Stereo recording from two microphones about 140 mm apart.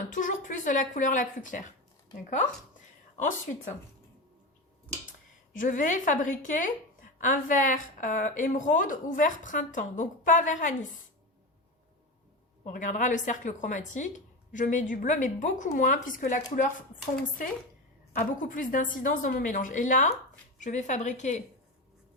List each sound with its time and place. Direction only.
0.1 s a woman's voice: 65° left (ahead or behind)
5.5 s a woman's voice: 70° left (ahead or behind)
12.6 s a woman's voice: 65° left (ahead or behind)
18.1 s a woman's voice: 75° left (ahead or behind); by 21.4 s 60° left (ahead or behind)